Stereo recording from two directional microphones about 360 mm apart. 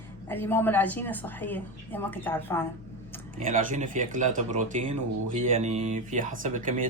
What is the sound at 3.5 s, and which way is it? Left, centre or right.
Speech, right.